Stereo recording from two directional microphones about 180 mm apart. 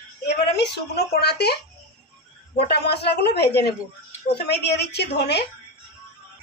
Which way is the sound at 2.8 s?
65° left (ahead or behind).